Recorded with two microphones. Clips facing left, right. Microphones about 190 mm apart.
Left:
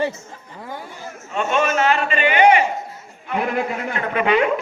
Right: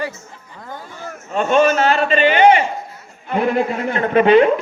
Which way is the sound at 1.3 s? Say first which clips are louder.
Right 5 dB; 35° right (ahead or behind).